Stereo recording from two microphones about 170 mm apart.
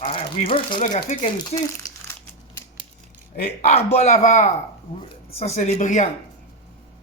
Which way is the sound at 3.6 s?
40° left (ahead or behind).